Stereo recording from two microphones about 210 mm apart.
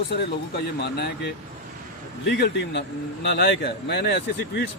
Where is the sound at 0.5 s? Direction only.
50° left (ahead or behind).